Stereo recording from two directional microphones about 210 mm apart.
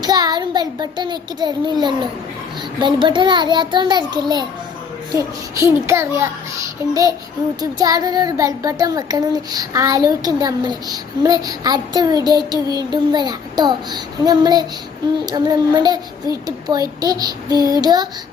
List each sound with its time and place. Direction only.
0.0 s a child's voice: 20° right (ahead or behind)
7.6 s a child's voice: 20° right (ahead or behind)